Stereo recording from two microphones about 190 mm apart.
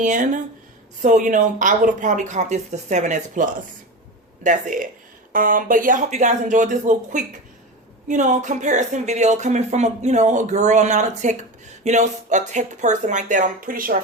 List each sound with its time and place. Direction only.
0.0 s speech: 40° right (ahead or behind)